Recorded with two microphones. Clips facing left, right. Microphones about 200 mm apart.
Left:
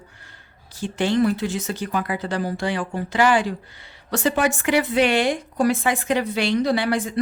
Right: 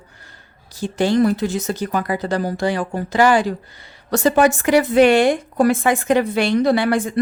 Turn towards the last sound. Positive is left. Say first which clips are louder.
# right 4 dB
turn(degrees=-50)  # may be behind; listen again after turning